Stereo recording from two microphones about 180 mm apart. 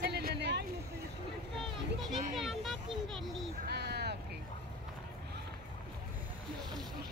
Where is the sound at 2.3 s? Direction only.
Centre (ahead or behind).